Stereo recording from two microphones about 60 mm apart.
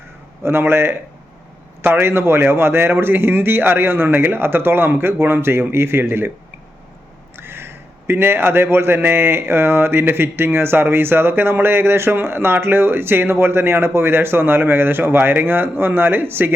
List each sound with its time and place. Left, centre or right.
0.4 s speech: right
7.3 s speech: right